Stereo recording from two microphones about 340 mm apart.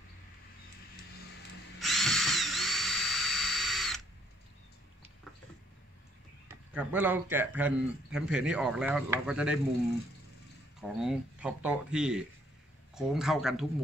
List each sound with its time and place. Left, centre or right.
1.8 s drill: centre
6.7 s a man's voice: centre
10.8 s a man's voice: centre